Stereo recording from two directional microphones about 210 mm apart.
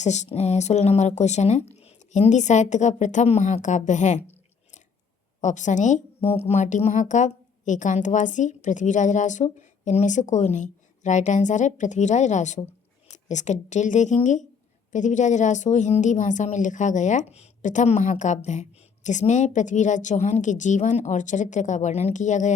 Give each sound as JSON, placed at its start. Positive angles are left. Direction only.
{"t": 0.0, "sound": "a woman's voice", "side_deg": 35}
{"t": 5.4, "sound": "a woman's voice", "side_deg": 35}